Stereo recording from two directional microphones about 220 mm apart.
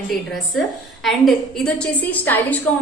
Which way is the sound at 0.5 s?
Centre (ahead or behind).